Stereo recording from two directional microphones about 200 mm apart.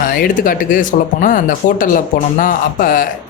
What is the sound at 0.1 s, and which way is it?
Speech, 45° left (ahead or behind).